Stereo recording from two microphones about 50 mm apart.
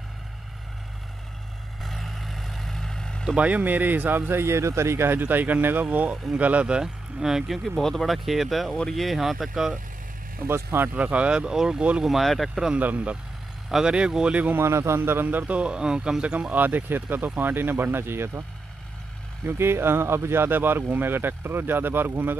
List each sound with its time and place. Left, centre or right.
1.8 s vehicle: centre
3.3 s speech: right
6.8 s speech: centre
10.4 s speech: right
11.0 s speech: right; by 12.3 s centre
12.7 s speech: right
13.7 s speech: centre
13.9 s speech: centre
14.6 s a man's voice: right
15.0 s speech: right
15.2 s speech: right
16.5 s speech: right
19.4 s speech: right